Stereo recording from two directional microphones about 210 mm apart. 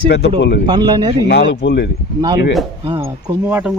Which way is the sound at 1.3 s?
50° left (ahead or behind).